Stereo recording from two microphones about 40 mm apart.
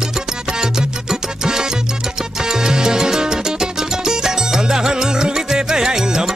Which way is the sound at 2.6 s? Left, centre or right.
Centre.